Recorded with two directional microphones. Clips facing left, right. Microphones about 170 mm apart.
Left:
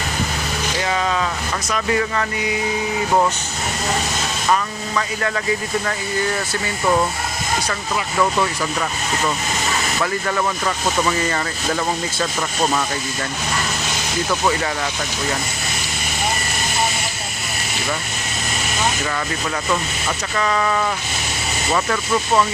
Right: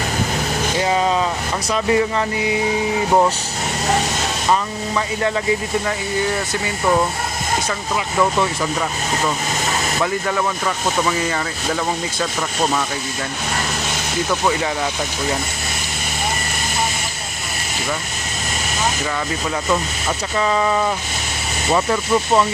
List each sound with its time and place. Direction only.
0.8 s vehicle: 25° right (ahead or behind)
1.7 s speech: 25° right (ahead or behind)
10.0 s speech: 10° right (ahead or behind)
20.3 s speech: 15° right (ahead or behind)